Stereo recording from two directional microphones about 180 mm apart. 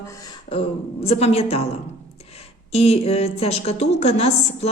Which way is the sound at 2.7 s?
35° left (ahead or behind).